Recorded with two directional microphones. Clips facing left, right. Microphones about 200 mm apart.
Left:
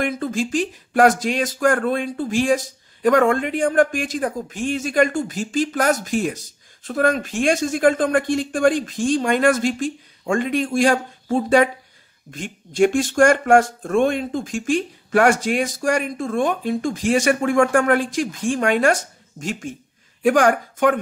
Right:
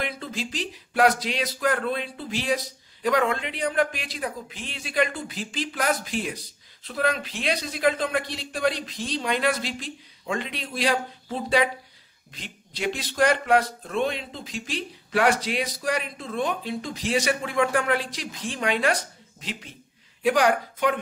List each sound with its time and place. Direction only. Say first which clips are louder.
0.0 s speech: left 9 dB; 50° left (ahead or behind)